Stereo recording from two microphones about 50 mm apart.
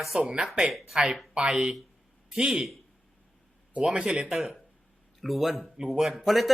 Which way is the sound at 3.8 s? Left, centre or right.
Centre.